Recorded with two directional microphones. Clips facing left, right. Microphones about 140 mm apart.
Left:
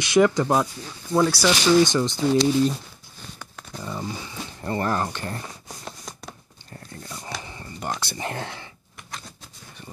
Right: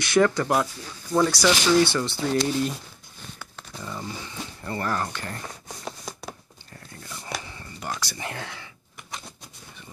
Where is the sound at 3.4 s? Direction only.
15° left (ahead or behind).